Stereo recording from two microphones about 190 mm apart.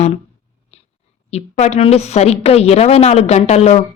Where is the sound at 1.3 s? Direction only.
35° left (ahead or behind).